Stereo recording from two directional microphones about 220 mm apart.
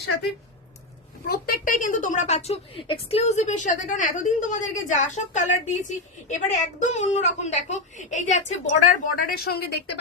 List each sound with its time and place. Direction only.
1.3 s a woman's voice: 40° left (ahead or behind)